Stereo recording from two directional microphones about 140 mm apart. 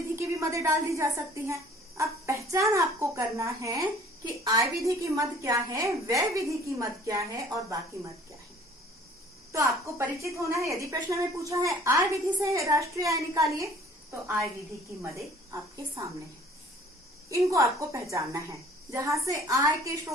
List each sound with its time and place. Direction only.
0.2 s a woman's voice: 20° right (ahead or behind)
9.5 s a woman's voice: 20° right (ahead or behind)
15.4 s a woman's voice: 20° right (ahead or behind)
17.5 s a woman's voice: 20° right (ahead or behind)